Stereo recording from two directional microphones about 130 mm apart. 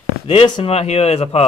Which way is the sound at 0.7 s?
50° left (ahead or behind).